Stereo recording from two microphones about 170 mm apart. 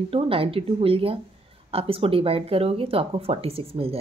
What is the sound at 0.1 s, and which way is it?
Speech, 35° right (ahead or behind).